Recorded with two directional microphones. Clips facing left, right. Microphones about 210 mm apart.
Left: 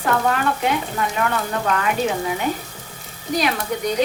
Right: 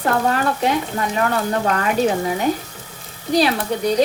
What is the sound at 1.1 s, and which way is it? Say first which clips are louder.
Speech: right 5 dB; 35° right (ahead or behind).